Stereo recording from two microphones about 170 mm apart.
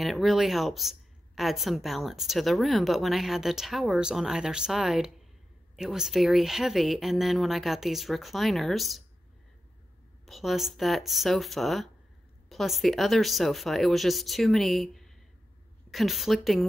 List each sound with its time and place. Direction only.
0.0 s a woman's voice: centre (ahead or behind)
10.2 s a woman's voice: centre (ahead or behind)